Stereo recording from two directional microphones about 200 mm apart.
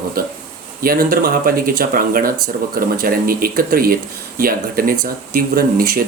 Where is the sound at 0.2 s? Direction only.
50° right (ahead or behind).